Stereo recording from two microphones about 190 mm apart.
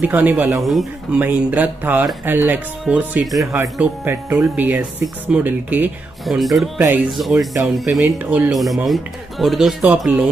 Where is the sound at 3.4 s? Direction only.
15° right (ahead or behind).